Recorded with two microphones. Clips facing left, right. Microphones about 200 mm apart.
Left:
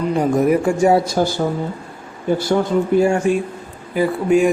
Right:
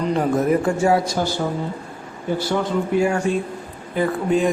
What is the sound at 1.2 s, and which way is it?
Speech, 40° left (ahead or behind).